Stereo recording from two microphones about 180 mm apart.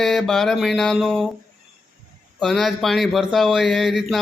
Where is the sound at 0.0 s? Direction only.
Centre (ahead or behind).